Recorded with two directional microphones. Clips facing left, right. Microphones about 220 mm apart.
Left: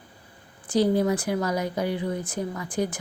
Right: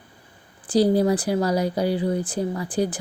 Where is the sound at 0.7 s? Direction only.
35° right (ahead or behind).